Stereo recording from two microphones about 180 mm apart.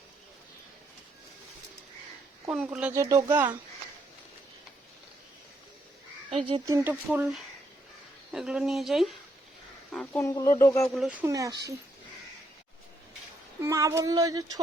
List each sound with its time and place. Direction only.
2.5 s speech: 5° right (ahead or behind)
6.7 s speech: 15° right (ahead or behind)
8.3 s speech: centre (ahead or behind); by 10.8 s 15° left (ahead or behind)
10.9 s speech: 5° right (ahead or behind)
13.6 s speech: 15° right (ahead or behind)